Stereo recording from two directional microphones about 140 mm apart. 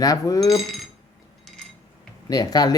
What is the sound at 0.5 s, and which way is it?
Speech, centre (ahead or behind).